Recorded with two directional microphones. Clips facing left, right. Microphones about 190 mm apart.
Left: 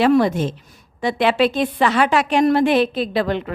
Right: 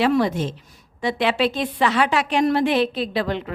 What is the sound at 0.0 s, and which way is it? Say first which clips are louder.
A woman's voice: left 4 dB; 50° left (ahead or behind).